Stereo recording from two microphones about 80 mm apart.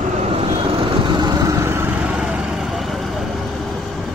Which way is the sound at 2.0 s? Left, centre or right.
Centre.